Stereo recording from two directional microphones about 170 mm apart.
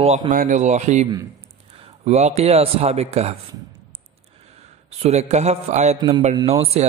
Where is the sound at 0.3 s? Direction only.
50° right (ahead or behind).